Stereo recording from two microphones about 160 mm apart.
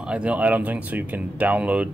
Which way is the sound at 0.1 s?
10° right (ahead or behind).